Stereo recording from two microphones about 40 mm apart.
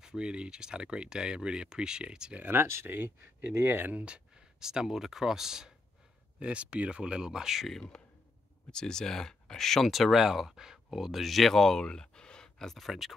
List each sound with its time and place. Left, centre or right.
0.0 s speech: right
2.5 s speech: right
3.9 s speech: right
4.6 s speech: centre
6.4 s speech: right; by 7.6 s centre
7.9 s a sound: centre
8.7 s speech: centre
11.8 s a sound: centre
12.7 s speech: centre